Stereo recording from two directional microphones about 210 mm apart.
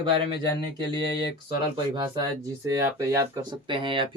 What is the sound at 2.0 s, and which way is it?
Speech, 15° right (ahead or behind).